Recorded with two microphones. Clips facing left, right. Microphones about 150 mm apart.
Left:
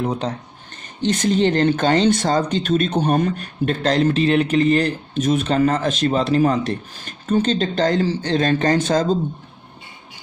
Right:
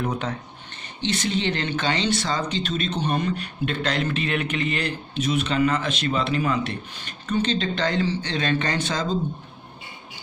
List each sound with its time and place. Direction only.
0.0 s speech: 30° left (ahead or behind)
1.0 s speech: 45° left (ahead or behind)